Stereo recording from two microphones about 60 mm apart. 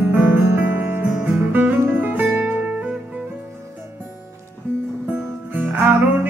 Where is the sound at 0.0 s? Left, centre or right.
Right.